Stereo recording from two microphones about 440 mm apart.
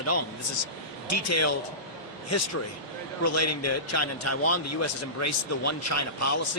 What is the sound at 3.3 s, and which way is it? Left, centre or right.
A man's voice, left.